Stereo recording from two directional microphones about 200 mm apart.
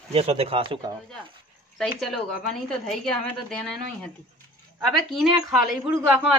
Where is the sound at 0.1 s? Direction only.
30° right (ahead or behind).